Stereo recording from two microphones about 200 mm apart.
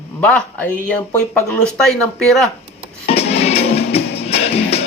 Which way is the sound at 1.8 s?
Centre (ahead or behind).